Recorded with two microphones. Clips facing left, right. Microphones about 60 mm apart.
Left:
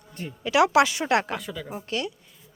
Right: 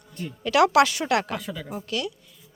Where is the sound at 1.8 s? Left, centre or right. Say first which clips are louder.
Even; left.